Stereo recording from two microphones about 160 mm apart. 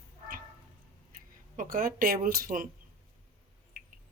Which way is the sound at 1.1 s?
60° right (ahead or behind).